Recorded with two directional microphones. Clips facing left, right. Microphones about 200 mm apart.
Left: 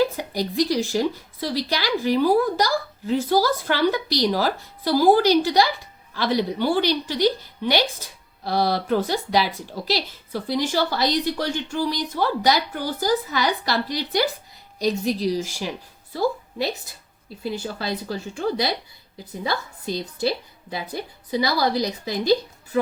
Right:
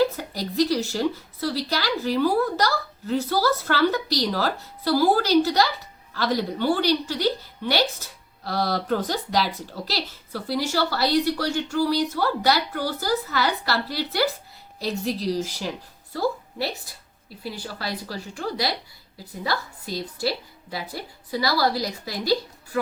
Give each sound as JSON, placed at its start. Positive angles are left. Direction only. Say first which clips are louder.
{"t": 0.0, "sound": "a woman's voice", "louder": "left 1 dB", "side_deg": 15}